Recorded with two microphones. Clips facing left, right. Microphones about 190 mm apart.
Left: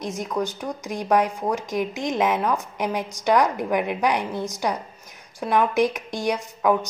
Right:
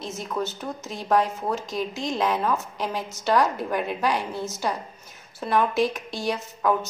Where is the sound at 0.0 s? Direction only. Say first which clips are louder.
Left 3 dB; 15° left (ahead or behind).